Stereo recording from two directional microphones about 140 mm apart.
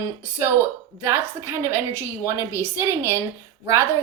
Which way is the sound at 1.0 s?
15° right (ahead or behind).